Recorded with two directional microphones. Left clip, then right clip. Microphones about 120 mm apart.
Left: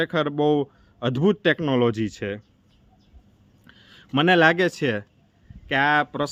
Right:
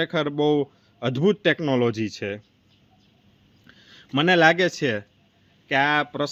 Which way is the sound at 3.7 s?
45° left (ahead or behind).